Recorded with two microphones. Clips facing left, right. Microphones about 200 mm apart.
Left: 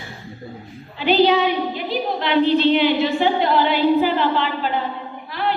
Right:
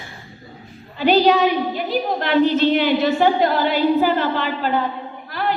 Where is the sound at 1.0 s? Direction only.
45° right (ahead or behind).